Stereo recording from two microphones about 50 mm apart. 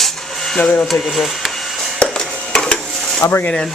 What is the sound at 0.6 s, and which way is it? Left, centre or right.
Speech, left.